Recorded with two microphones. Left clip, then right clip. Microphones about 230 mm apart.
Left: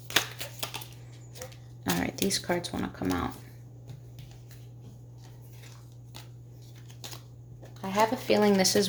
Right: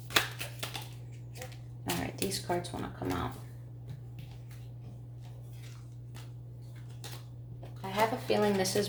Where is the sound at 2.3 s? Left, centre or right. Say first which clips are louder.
Left 4 dB; left.